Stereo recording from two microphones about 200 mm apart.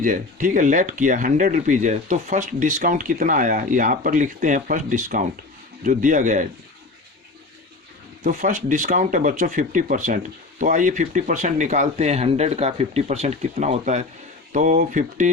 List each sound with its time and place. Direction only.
0.0 s speech: 40° right (ahead or behind)
8.2 s speech: 40° right (ahead or behind)